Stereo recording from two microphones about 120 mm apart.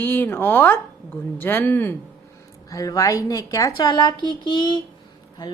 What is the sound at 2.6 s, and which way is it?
Speech, 30° left (ahead or behind).